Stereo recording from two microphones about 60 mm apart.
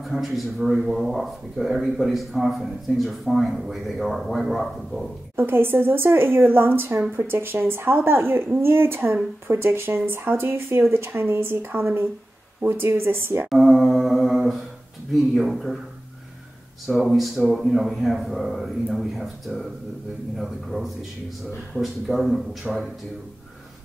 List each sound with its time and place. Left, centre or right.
0.0 s speech: centre
5.3 s speech: right
13.5 s mantra: centre
15.3 s speech: centre
16.8 s speech: centre